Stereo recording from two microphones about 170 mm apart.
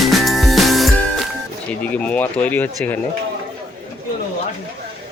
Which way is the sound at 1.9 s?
10° left (ahead or behind).